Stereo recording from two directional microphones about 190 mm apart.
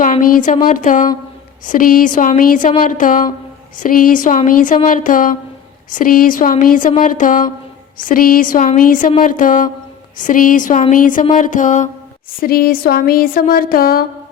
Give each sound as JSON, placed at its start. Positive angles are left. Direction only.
{"t": 0.0, "sound": "a woman's voice", "side_deg": 45}
{"t": 11.3, "sound": "music", "side_deg": 40}
{"t": 12.4, "sound": "a woman's voice", "side_deg": 50}